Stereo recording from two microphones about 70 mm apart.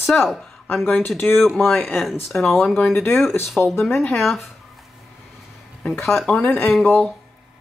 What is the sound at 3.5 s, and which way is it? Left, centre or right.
Speech, centre.